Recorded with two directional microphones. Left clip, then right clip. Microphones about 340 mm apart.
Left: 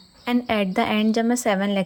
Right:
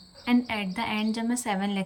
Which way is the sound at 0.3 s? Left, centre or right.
Centre.